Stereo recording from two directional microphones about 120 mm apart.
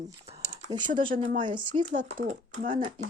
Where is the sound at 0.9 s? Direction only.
90° right.